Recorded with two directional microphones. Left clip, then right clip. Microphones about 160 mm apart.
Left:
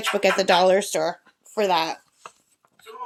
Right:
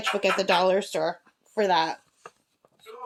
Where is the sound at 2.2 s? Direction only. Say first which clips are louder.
Left 4 dB; 30° left (ahead or behind).